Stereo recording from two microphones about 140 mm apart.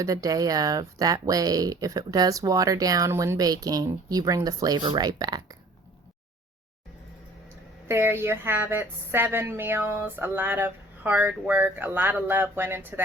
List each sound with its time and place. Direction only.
0.0 s speech: 25° right (ahead or behind)
7.9 s a woman's voice: 15° right (ahead or behind)